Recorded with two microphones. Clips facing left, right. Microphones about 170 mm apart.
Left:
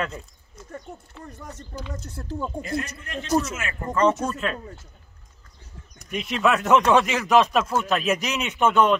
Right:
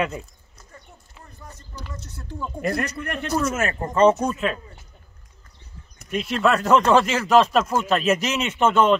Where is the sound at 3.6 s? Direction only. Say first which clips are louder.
Right 8 dB; 40° right (ahead or behind).